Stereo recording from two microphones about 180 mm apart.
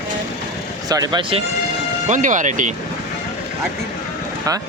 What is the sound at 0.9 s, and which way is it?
Speech, 20° right (ahead or behind).